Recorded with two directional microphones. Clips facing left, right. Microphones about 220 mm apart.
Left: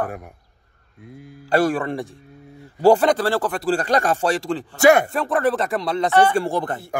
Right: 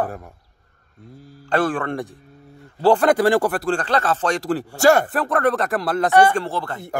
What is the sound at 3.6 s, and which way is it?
Speech, 10° left (ahead or behind).